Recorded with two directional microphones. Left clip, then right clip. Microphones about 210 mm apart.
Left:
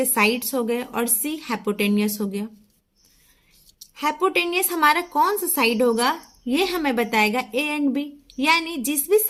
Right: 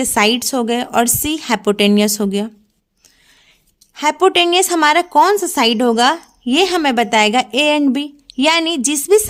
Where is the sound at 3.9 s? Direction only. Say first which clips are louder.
Right 8 dB; 45° right (ahead or behind).